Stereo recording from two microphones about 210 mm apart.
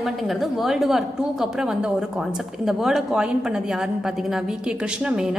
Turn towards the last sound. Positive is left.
turn(degrees=-5)  # may be behind; listen again after turning